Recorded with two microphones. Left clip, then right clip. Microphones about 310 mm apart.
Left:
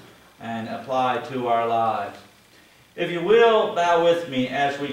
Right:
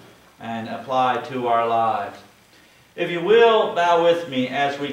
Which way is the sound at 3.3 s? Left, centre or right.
Centre.